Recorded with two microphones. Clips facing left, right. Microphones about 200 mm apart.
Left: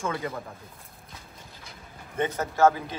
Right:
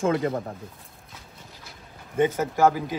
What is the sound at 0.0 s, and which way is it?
Speech, 50° right (ahead or behind).